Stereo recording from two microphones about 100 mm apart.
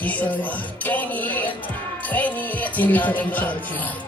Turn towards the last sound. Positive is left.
turn(degrees=15)  # may be behind; listen again after turning